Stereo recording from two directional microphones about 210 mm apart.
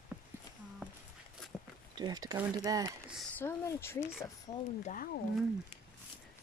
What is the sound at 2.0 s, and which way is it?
Speech, 20° right (ahead or behind).